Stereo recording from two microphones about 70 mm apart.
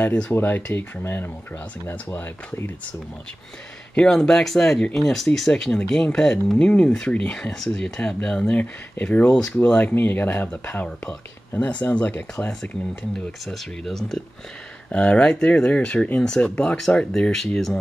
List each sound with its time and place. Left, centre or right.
0.0 s speech: centre
0.3 s speech: left
3.9 s speech: centre
9.3 s speech: centre
9.9 s speech: left
13.5 s speech: centre
14.9 s speech: centre